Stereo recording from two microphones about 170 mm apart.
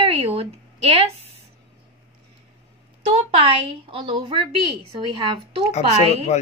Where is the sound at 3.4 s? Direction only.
30° right (ahead or behind).